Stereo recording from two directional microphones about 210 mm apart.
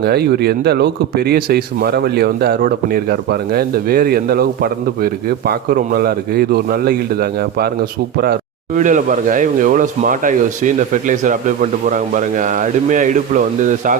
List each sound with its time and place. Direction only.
0.0 s a man's voice: 50° right (ahead or behind)